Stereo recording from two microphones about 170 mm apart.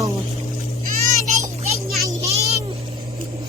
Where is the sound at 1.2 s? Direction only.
45° right (ahead or behind).